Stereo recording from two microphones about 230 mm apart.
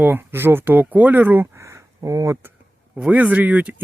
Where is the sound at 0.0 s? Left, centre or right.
Centre.